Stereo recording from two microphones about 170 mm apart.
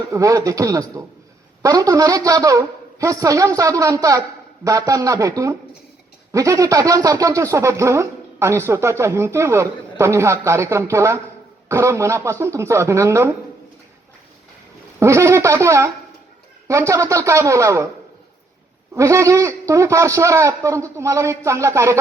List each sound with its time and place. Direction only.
0.1 s a woman's voice: 20° right (ahead or behind)
14.9 s speech: 15° right (ahead or behind)
18.9 s speech: 20° right (ahead or behind)